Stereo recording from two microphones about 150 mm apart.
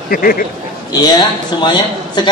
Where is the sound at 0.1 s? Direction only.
75° left (ahead or behind).